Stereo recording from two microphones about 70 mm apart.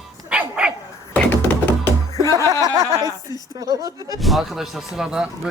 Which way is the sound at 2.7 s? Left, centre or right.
Right.